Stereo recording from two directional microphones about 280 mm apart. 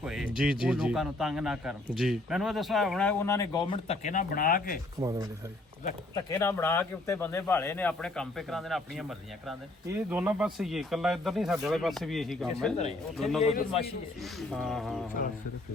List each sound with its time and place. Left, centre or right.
0.0 s speech: centre; by 4.8 s left
4.9 s speech: centre
6.2 s speech: centre